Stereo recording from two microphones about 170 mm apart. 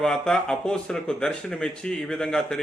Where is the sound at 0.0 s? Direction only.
5° left (ahead or behind).